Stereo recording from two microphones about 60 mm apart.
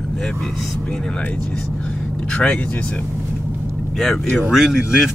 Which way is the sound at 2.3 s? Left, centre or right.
Centre.